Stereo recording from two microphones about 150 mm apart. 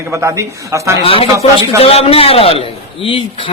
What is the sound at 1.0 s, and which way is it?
A man's voice, 40° left (ahead or behind).